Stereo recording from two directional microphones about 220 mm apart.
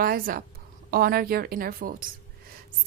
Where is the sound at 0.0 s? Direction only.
40° right (ahead or behind).